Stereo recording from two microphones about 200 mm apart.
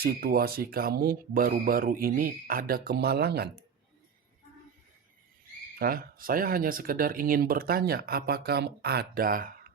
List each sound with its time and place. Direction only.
0.0 s speech: 50° right (ahead or behind)
5.8 s speech: 45° right (ahead or behind)